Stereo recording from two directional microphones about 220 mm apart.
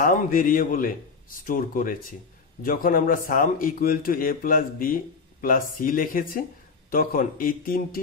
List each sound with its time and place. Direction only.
0.0 s a man's voice: 40° left (ahead or behind)